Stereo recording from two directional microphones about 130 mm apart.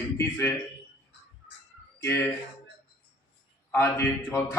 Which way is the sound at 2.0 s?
15° left (ahead or behind).